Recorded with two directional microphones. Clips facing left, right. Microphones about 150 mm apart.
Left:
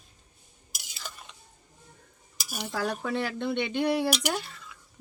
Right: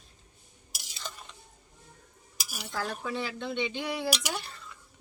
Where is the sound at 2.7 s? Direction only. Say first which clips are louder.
Left 4 dB; 60° left (ahead or behind).